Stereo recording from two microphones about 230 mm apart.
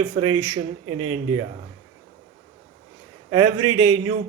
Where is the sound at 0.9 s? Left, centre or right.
Right.